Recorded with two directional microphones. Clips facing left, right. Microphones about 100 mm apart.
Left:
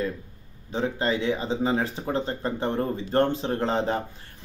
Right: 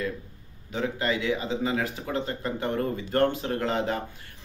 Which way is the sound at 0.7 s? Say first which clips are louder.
Left 2 dB; 30° left (ahead or behind).